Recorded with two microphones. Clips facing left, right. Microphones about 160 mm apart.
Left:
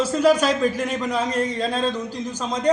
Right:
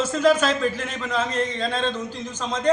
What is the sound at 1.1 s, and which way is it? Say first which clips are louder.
Speech: right 2 dB; 10° left (ahead or behind).